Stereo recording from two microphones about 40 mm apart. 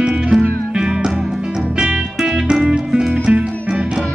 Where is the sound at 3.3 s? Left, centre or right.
Right.